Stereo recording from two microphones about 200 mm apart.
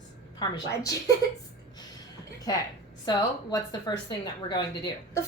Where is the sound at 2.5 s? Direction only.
20° left (ahead or behind).